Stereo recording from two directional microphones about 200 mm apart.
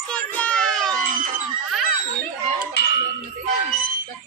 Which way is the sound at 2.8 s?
55° left (ahead or behind).